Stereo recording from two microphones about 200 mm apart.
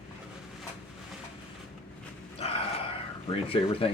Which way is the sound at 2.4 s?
30° left (ahead or behind).